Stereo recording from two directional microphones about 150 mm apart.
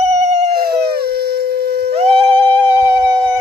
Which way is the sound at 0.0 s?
45° right (ahead or behind).